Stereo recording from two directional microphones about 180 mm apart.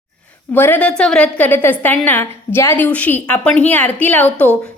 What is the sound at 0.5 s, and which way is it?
A woman's voice, 10° left (ahead or behind).